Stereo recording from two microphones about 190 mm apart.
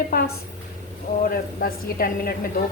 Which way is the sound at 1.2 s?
50° left (ahead or behind).